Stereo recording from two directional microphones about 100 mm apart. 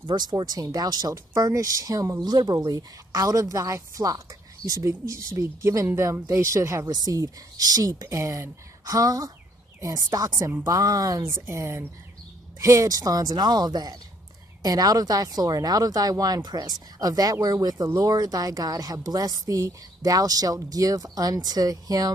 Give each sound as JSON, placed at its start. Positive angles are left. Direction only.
{"t": 0.0, "sound": "speech", "side_deg": -50}
{"t": 11.3, "sound": "speech", "side_deg": -25}